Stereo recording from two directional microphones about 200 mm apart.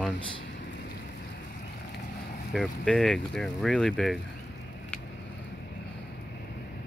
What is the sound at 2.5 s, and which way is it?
Speech, centre (ahead or behind).